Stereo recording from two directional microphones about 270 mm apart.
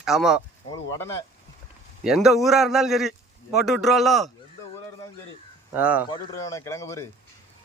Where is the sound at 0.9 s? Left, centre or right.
Centre.